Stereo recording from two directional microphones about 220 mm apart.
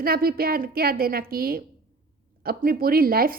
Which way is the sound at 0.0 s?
45° right (ahead or behind).